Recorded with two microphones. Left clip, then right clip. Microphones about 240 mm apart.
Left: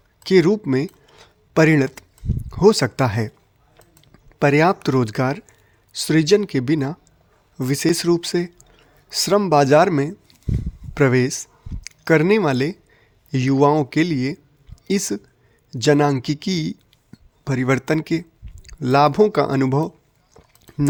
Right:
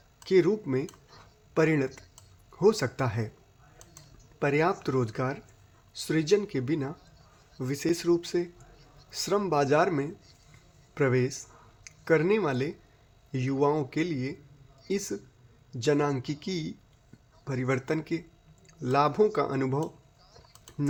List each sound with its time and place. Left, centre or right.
0.2 s a man's voice: left
4.4 s a man's voice: left